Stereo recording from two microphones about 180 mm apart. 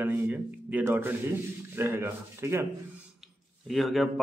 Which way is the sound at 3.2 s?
Centre (ahead or behind).